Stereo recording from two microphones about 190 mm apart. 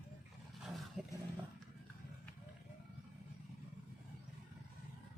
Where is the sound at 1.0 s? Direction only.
5° right (ahead or behind).